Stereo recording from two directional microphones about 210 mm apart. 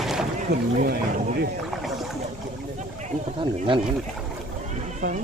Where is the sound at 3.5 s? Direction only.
25° right (ahead or behind).